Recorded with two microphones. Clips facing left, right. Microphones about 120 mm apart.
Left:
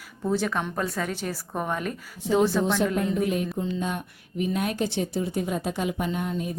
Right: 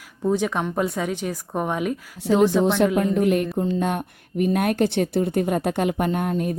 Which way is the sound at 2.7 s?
70° right (ahead or behind).